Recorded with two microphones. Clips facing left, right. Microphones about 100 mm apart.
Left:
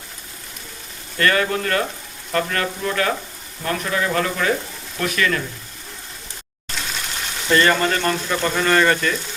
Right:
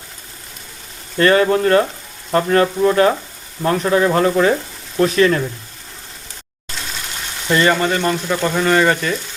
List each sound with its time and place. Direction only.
1.2 s speech: 25° right (ahead or behind)
7.5 s speech: 15° right (ahead or behind)